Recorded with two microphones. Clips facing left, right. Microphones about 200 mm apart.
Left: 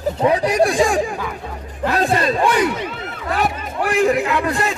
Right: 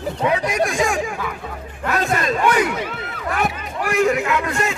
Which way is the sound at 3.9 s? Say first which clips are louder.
Left 1 dB; 35° left (ahead or behind).